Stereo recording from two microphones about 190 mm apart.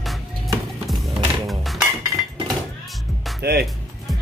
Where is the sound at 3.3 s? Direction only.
55° right (ahead or behind).